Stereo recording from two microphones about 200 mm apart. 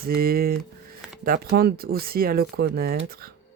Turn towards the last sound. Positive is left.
turn(degrees=-50)  # may be behind; listen again after turning